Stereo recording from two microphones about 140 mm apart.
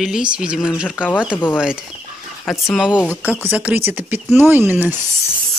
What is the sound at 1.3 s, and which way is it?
Speech, 15° left (ahead or behind).